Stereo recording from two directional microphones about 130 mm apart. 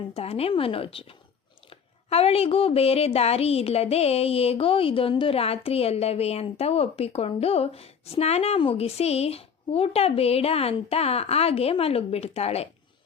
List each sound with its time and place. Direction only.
0.1 s a woman's voice: 50° left (ahead or behind)
2.0 s a woman's voice: 50° left (ahead or behind)